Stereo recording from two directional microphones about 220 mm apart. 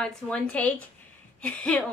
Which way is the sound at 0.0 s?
5° left (ahead or behind).